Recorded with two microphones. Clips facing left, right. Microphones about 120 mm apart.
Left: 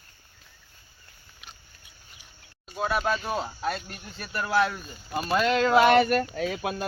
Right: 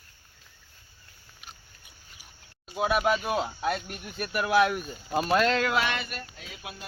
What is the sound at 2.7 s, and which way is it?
Speech, 15° right (ahead or behind).